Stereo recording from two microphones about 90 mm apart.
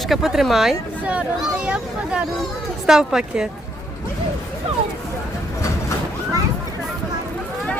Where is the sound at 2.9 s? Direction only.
5° right (ahead or behind).